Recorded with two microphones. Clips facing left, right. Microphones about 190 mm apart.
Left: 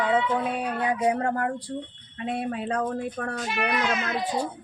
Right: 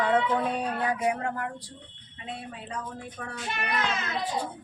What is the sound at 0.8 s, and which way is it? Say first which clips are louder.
Speech: left 4 dB; 25° left (ahead or behind).